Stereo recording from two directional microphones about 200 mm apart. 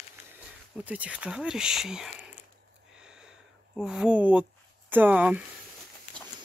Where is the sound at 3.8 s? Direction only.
5° right (ahead or behind).